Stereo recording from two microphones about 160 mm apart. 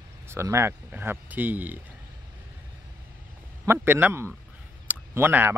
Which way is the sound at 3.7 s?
15° right (ahead or behind).